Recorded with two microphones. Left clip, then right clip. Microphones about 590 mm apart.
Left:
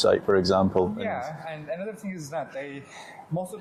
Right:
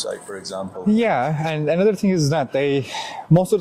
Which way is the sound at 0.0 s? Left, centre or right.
Left.